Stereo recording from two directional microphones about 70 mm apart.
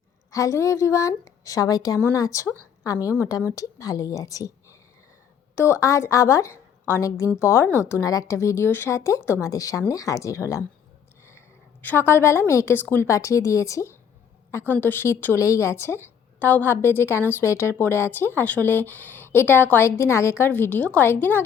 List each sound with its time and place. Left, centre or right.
0.3 s a woman's voice: left
5.5 s a woman's voice: left
7.9 s speech: left
11.8 s a woman's voice: left
12.7 s a woman's voice: left
13.1 s speech: left
14.7 s a woman's voice: left
15.4 s a woman's voice: left
20.4 s a woman's voice: left